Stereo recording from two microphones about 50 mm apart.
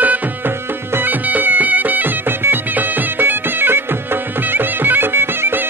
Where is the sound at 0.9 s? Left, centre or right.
Right.